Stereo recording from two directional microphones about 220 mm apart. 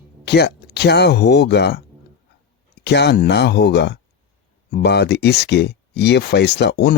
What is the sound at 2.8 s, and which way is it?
Speech, 50° left (ahead or behind).